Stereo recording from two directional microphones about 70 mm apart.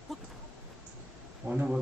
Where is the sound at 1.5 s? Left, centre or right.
Centre.